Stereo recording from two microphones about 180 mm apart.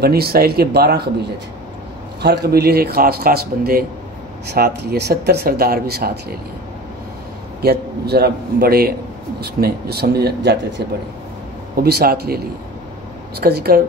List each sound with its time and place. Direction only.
0.0 s speech: 60° right (ahead or behind)
2.2 s speech: 65° right (ahead or behind)
7.6 s speech: 60° right (ahead or behind)
11.7 s speech: 60° right (ahead or behind)
13.4 s speech: 60° right (ahead or behind)